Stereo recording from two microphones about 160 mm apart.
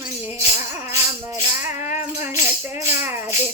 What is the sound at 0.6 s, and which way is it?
Speech, 15° right (ahead or behind).